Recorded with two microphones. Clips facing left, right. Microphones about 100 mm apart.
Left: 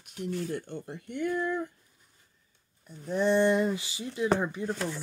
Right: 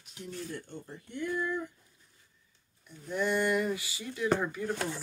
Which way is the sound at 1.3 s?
45° left (ahead or behind).